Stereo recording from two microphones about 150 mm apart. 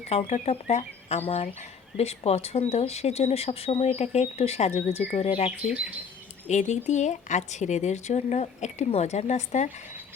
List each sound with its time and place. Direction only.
0.1 s speech: 45° left (ahead or behind)
5.5 s speech: 10° right (ahead or behind)
6.5 s speech: 50° left (ahead or behind)